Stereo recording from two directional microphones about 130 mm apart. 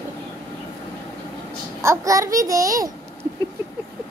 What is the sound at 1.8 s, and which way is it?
A woman's voice, 25° right (ahead or behind).